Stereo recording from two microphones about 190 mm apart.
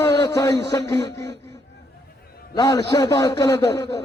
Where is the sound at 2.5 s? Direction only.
20° left (ahead or behind).